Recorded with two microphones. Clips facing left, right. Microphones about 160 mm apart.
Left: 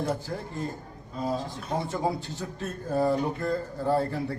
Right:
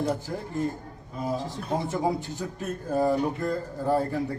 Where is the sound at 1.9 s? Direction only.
15° right (ahead or behind).